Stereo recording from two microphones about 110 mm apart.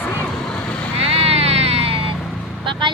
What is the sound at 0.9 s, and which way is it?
Vehicle, 65° right (ahead or behind).